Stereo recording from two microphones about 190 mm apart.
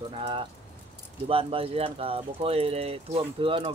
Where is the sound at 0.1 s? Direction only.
25° right (ahead or behind).